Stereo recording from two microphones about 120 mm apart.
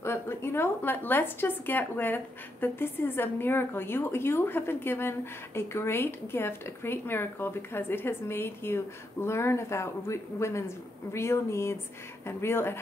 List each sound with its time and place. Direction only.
0.0 s a woman's voice: 20° left (ahead or behind)